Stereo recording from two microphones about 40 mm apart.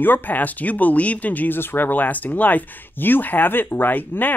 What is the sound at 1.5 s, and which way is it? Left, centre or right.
Speech, left.